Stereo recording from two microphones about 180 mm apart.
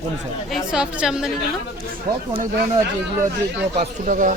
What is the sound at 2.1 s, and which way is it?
Speech, 20° right (ahead or behind).